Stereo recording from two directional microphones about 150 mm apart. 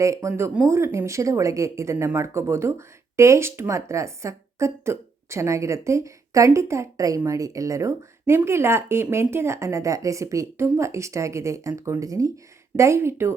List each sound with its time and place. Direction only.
0.0 s speech: 20° right (ahead or behind)